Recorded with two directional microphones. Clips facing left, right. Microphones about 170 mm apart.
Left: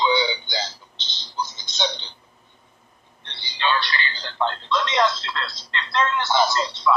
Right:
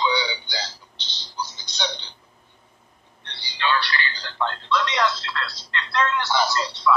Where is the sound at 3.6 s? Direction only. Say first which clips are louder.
Even; 25° left (ahead or behind).